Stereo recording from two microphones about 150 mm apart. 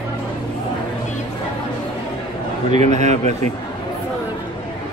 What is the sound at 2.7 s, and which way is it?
Speech, 50° right (ahead or behind).